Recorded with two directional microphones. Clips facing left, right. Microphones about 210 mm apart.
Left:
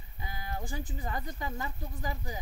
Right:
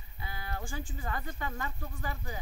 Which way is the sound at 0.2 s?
15° left (ahead or behind).